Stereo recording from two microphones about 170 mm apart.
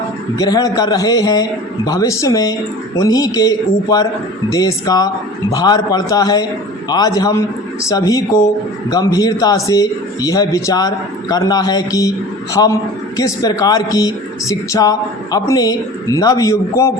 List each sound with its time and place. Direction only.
0.3 s speech: 20° left (ahead or behind)